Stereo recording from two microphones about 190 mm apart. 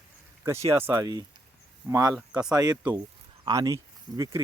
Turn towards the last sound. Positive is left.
turn(degrees=-15)  # may be behind; listen again after turning